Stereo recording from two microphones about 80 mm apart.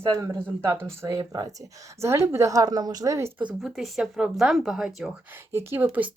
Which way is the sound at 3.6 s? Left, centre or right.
Centre.